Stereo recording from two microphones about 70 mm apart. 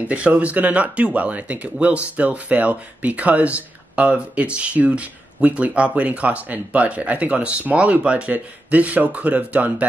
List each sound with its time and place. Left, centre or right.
0.0 s speech: centre